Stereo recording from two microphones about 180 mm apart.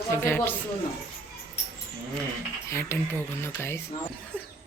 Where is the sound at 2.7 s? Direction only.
15° left (ahead or behind).